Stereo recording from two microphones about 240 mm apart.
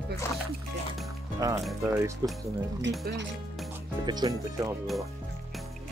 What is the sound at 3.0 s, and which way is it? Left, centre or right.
Speech, right.